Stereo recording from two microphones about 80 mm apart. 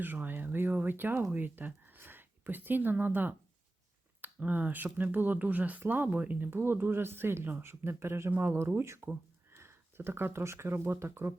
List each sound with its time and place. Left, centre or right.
0.0 s speech: right